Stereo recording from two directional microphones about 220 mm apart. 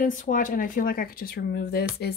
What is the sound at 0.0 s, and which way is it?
Speech, 35° left (ahead or behind).